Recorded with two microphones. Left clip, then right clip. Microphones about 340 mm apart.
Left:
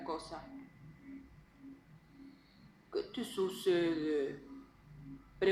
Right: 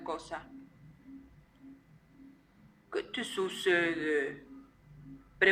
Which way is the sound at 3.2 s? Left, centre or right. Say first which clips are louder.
Right 3 dB; right.